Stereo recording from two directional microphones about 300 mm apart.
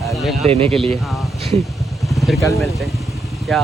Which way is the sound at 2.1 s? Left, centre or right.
Centre.